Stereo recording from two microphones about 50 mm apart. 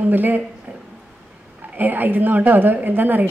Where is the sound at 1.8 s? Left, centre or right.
Right.